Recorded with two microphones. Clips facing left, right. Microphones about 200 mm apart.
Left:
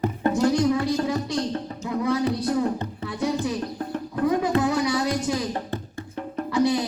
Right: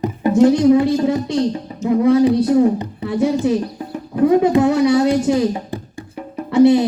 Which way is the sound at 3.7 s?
10° right (ahead or behind).